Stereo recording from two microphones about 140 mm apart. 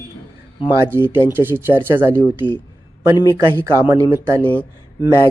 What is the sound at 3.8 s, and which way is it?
Speech, 20° right (ahead or behind).